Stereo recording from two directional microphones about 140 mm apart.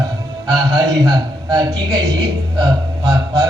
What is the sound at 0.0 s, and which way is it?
A man's voice, 30° right (ahead or behind).